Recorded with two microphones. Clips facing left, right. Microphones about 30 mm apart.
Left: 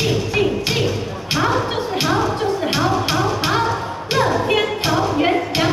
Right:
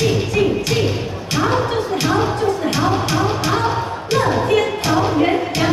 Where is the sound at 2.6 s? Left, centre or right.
Left.